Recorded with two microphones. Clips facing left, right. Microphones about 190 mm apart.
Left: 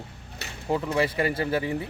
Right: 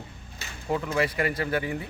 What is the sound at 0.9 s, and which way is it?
Speech, 30° left (ahead or behind).